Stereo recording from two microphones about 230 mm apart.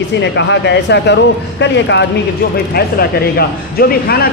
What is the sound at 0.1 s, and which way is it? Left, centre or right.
Speech, left.